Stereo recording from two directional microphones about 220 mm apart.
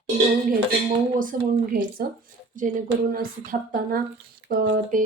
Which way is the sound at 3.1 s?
40° right (ahead or behind).